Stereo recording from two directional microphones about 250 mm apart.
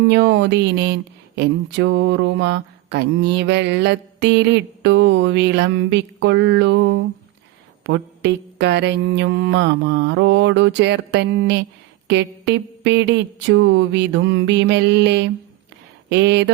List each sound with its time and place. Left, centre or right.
0.1 s mantra: right
16.0 s speech: right